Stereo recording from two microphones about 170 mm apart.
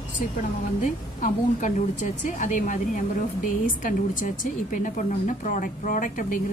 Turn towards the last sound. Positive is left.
turn(degrees=50)  # may be behind; listen again after turning